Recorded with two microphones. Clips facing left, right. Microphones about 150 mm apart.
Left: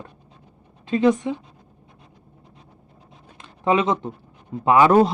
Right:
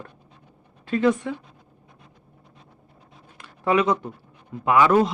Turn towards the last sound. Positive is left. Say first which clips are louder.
# left 3 dB
turn(degrees=35)  # may be behind; listen again after turning